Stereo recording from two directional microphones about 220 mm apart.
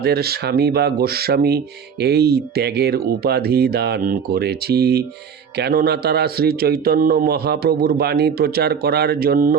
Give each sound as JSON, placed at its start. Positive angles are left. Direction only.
{"t": 0.0, "sound": "speech", "side_deg": -45}